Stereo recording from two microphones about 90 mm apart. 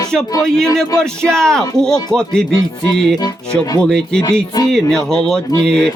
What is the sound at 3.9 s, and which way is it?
Speech, 5° left (ahead or behind).